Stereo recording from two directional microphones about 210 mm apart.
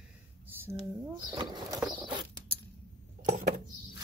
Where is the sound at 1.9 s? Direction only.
20° right (ahead or behind).